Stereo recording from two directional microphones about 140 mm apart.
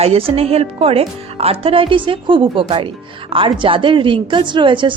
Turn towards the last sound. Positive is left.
turn(degrees=-35)  # may be behind; listen again after turning